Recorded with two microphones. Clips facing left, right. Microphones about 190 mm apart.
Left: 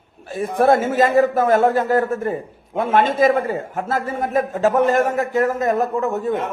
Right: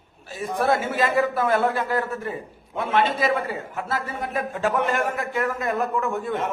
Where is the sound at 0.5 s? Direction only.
50° left (ahead or behind).